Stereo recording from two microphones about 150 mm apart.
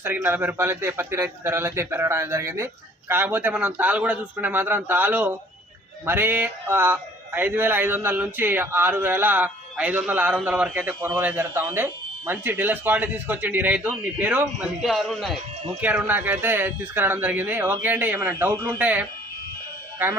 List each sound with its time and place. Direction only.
0.0 s speech: 15° right (ahead or behind); by 15.4 s centre (ahead or behind)
15.8 s speech: 10° right (ahead or behind)